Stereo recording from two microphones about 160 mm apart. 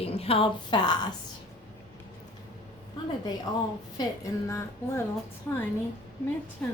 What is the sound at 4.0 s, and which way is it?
Speech, 20° left (ahead or behind).